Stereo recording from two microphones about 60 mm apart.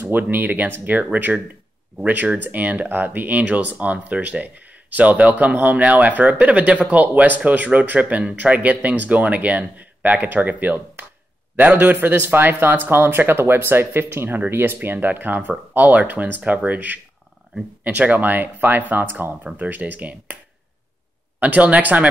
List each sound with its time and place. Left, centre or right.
0.0 s speech: right
21.4 s speech: right